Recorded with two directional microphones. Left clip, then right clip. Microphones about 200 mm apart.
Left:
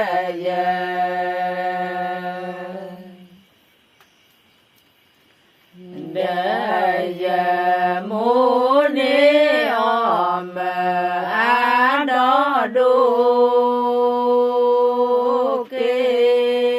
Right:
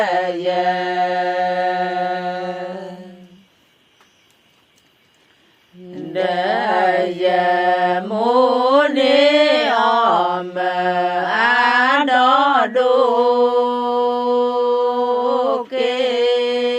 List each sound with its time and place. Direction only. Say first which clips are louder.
0.0 s mantra: right 3 dB; 35° right (ahead or behind)
5.9 s mantra: right 2 dB; 35° right (ahead or behind)